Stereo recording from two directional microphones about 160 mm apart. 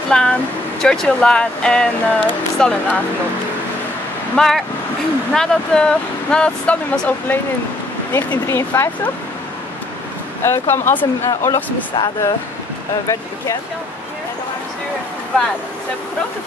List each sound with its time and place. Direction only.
0.1 s speech: 5° left (ahead or behind)
4.4 s speech: centre (ahead or behind)
10.4 s speech: 15° left (ahead or behind)